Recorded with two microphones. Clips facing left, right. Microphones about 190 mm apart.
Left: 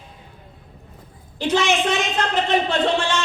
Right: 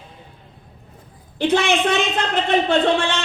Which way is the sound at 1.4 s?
60° right (ahead or behind).